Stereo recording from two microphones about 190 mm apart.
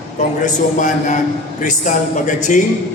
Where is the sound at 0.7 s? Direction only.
40° left (ahead or behind).